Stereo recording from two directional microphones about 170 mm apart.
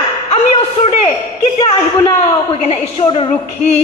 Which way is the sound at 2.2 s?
35° left (ahead or behind).